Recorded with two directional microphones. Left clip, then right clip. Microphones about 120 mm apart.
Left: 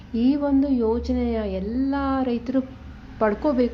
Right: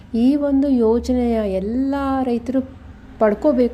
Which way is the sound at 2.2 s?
30° right (ahead or behind).